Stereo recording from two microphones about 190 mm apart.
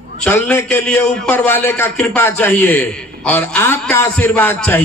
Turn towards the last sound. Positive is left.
turn(degrees=10)  # may be behind; listen again after turning